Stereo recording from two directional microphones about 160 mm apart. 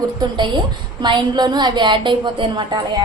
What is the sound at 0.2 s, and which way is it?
A woman's voice, 30° right (ahead or behind).